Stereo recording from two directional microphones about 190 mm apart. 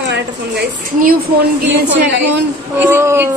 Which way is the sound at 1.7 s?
70° right (ahead or behind).